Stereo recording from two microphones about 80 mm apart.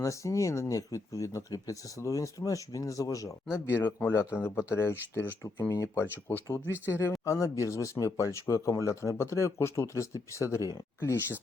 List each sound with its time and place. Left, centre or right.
0.0 s speech: left
3.7 s speech: left